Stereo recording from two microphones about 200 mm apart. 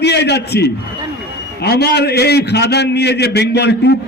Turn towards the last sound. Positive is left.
turn(degrees=55)  # may be behind; listen again after turning